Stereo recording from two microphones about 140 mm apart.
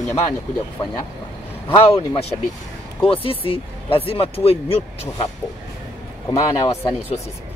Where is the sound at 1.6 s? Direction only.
40° left (ahead or behind).